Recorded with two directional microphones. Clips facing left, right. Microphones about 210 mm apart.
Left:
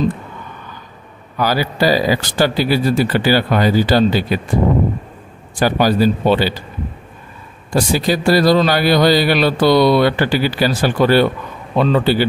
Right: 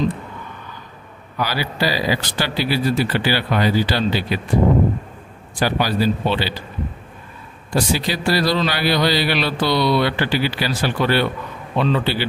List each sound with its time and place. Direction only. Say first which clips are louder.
1.4 s a man's voice: left 6 dB; 45° left (ahead or behind)
5.6 s a man's voice: left 5 dB; 45° left (ahead or behind)
7.7 s a man's voice: left 5 dB; 45° left (ahead or behind)